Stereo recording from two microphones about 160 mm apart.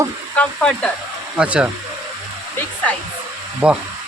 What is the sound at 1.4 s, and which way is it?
Speech, 5° right (ahead or behind).